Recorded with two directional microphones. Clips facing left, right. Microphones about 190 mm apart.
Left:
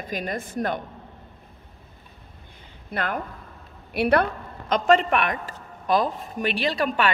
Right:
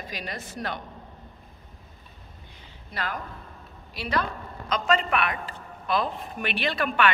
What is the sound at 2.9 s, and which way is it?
Speech, 55° left (ahead or behind).